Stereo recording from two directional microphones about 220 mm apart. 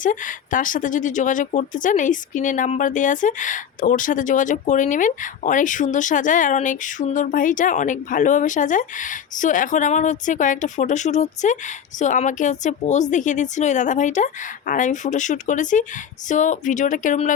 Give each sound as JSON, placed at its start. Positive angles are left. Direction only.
{"t": 0.0, "sound": "speech", "side_deg": 35}